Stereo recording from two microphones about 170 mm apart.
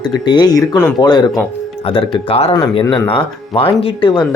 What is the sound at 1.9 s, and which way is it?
Speech, 30° left (ahead or behind).